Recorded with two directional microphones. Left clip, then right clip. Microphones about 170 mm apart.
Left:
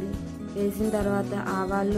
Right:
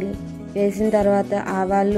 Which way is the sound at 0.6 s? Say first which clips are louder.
Right 9 dB; 20° right (ahead or behind).